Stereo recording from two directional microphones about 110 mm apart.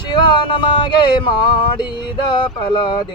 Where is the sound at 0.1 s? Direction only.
45° left (ahead or behind).